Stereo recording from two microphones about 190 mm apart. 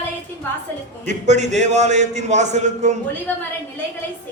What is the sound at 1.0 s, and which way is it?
A man's voice, 40° right (ahead or behind).